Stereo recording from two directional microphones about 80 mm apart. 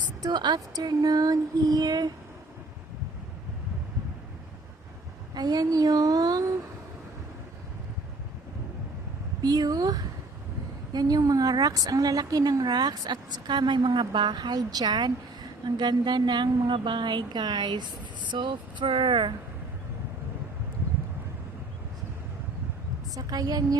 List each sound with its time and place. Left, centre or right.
0.2 s a woman's voice: right
5.3 s speech: right
9.4 s a woman's voice: right
23.1 s speech: right